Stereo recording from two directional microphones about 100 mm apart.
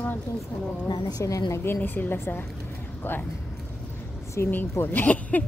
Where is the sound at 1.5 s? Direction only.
20° left (ahead or behind).